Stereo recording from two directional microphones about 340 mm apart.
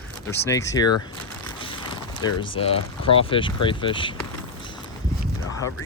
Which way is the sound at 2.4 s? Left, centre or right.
Centre.